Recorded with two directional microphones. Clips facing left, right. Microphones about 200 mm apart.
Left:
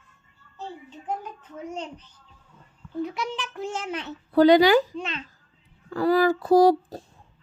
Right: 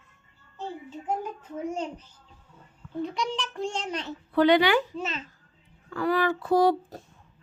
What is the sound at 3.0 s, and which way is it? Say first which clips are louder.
A child's voice: even; 5° left (ahead or behind).